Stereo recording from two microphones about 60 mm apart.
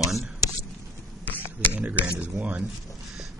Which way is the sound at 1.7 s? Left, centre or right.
Right.